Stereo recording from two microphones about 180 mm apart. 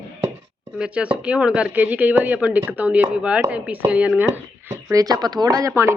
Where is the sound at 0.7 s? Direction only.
5° right (ahead or behind).